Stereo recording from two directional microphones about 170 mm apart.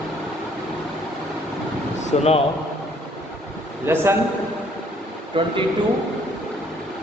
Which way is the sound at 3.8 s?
15° right (ahead or behind).